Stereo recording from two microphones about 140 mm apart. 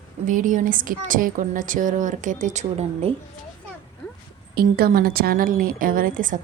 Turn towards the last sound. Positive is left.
turn(degrees=-75)  # may be behind; listen again after turning